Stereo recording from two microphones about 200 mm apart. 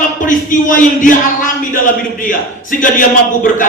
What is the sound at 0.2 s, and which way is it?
A man's voice, 40° left (ahead or behind).